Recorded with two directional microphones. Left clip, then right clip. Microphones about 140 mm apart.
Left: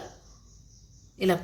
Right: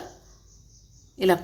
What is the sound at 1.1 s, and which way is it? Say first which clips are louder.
Speech: right 4 dB; 50° right (ahead or behind).